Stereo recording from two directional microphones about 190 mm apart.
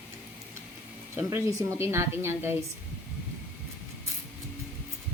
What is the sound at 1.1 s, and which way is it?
A woman's voice, 15° right (ahead or behind).